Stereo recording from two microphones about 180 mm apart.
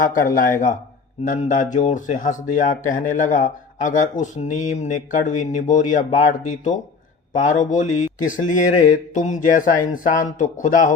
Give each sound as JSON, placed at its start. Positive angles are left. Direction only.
{"t": 0.0, "sound": "speech", "side_deg": 45}